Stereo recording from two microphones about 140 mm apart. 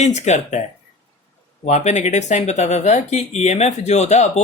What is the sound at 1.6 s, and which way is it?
Speech, 55° left (ahead or behind).